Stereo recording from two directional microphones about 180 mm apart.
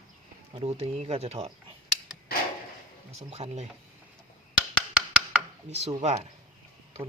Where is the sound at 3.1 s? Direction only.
35° right (ahead or behind).